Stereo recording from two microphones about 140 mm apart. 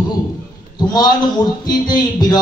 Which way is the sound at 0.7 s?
30° left (ahead or behind).